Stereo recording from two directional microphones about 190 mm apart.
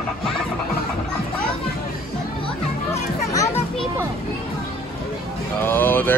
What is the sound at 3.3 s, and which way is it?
Children playing, 15° left (ahead or behind).